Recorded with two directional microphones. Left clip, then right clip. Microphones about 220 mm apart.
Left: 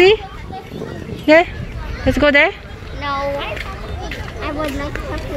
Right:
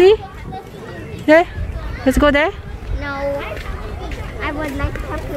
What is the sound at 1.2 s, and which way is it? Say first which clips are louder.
Speech: even; 20° right (ahead or behind).